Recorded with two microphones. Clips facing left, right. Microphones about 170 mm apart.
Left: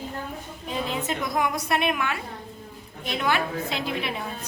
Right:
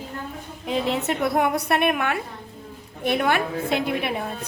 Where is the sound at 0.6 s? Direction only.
75° right (ahead or behind); by 4.1 s 55° right (ahead or behind).